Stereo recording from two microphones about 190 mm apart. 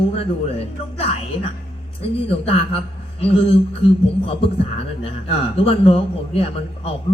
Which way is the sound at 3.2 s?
30° left (ahead or behind).